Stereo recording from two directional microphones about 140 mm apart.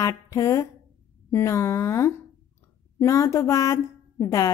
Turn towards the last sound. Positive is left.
turn(degrees=25)  # may be behind; listen again after turning